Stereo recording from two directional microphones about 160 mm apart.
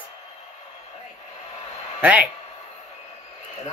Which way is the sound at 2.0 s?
10° right (ahead or behind).